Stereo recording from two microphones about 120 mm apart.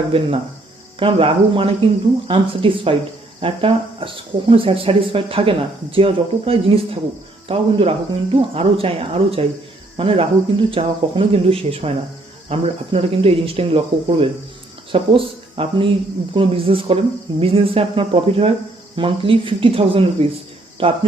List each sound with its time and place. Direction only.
0.1 s speech: 50° right (ahead or behind)